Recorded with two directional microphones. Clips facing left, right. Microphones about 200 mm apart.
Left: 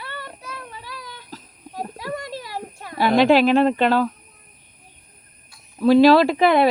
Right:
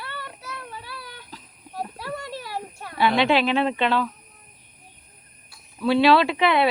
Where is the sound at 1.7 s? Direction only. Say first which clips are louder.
Left 2 dB; 15° left (ahead or behind).